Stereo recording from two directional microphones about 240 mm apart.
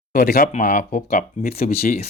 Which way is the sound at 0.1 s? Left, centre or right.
Left.